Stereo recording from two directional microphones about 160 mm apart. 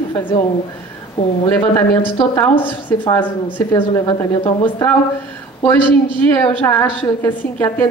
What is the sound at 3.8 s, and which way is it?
Speech, 25° left (ahead or behind).